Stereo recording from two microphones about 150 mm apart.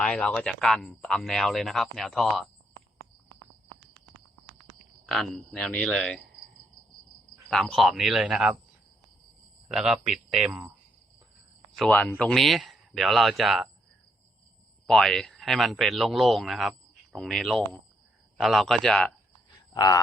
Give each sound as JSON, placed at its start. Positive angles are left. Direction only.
{"t": 0.0, "sound": "speech", "side_deg": 5}
{"t": 5.0, "sound": "speech", "side_deg": 0}
{"t": 7.4, "sound": "speech", "side_deg": 0}
{"t": 9.6, "sound": "speech", "side_deg": -5}
{"t": 11.8, "sound": "speech", "side_deg": 5}
{"t": 14.8, "sound": "speech", "side_deg": 5}
{"t": 19.7, "sound": "speech", "side_deg": 25}